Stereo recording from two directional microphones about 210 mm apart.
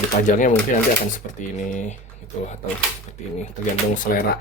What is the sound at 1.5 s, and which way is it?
Speech, 35° left (ahead or behind).